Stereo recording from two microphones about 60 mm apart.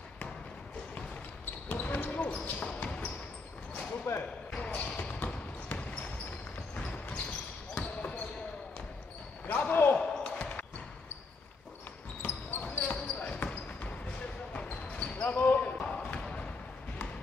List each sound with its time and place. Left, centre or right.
1.7 s basketball bounce: left
4.0 s basketball bounce: left
4.6 s basketball bounce: left
9.5 s basketball bounce: left
9.9 s basketball bounce: centre
12.6 s basketball bounce: left